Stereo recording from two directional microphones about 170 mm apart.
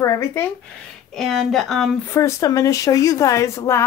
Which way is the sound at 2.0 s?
15° left (ahead or behind).